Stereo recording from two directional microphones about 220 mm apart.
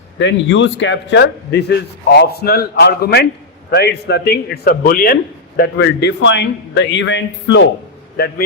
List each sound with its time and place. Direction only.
0.2 s a man's voice: 55° left (ahead or behind)